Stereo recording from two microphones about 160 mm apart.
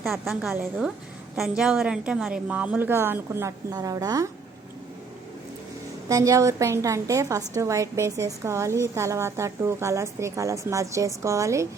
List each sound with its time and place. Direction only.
0.0 s a woman's voice: centre (ahead or behind); by 4.3 s 20° right (ahead or behind)
6.1 s a woman's voice: 20° right (ahead or behind)